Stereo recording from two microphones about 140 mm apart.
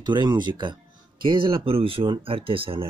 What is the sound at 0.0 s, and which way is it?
Speech, 30° right (ahead or behind).